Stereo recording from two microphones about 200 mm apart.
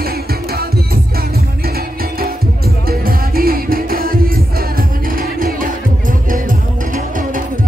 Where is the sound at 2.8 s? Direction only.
50° right (ahead or behind).